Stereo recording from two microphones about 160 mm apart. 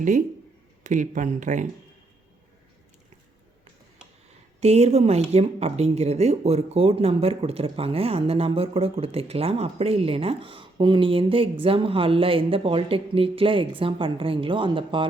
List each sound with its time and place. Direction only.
0.9 s speech: 50° right (ahead or behind)
4.6 s speech: 40° right (ahead or behind)